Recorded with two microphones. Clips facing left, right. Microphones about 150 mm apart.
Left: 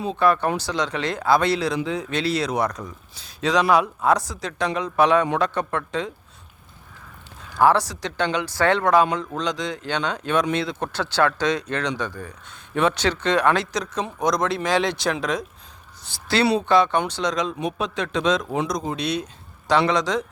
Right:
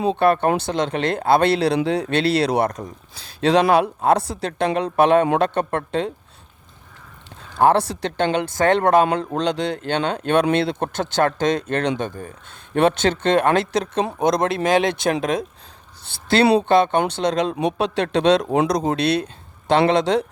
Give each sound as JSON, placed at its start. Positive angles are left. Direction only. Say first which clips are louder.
{"t": 0.2, "sound": "a man's voice", "louder": "even", "side_deg": -60}
{"t": 3.2, "sound": "a man's voice", "louder": "right 5 dB", "side_deg": -60}
{"t": 7.6, "sound": "a man's voice", "louder": "right 2 dB", "side_deg": -55}
{"t": 10.9, "sound": "a man's voice", "louder": "even", "side_deg": -50}
{"t": 15.2, "sound": "speech", "louder": "right 4 dB", "side_deg": -20}
{"t": 16.0, "sound": "a man's voice", "louder": "right 4 dB", "side_deg": -55}